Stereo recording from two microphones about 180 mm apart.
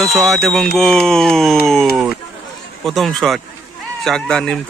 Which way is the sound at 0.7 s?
5° left (ahead or behind).